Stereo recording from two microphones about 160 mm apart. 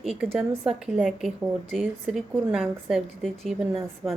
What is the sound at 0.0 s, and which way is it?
A woman's voice, centre (ahead or behind).